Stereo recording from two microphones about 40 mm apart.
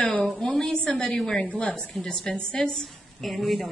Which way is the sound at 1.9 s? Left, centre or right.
Centre.